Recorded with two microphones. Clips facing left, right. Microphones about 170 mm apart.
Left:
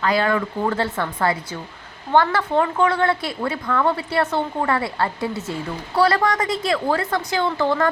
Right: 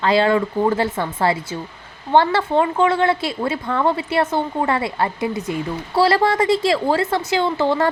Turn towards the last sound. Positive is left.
turn(degrees=-20)  # may be behind; listen again after turning